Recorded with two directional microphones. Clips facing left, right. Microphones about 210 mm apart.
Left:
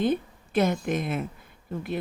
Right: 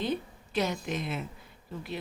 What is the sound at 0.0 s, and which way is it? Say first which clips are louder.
A woman's voice: left 7 dB; 50° left (ahead or behind).